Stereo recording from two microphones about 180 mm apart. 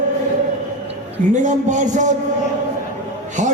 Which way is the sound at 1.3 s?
45° right (ahead or behind).